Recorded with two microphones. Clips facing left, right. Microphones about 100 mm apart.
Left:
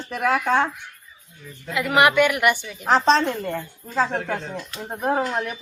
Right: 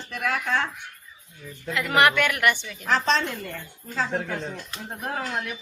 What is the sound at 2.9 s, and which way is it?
Speech, 35° left (ahead or behind).